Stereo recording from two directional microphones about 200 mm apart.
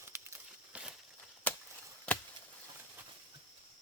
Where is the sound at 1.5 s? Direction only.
10° left (ahead or behind).